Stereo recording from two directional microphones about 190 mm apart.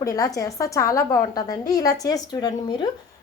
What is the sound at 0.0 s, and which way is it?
A woman's voice, 15° left (ahead or behind).